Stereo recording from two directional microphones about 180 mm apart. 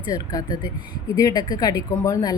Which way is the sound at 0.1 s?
20° left (ahead or behind).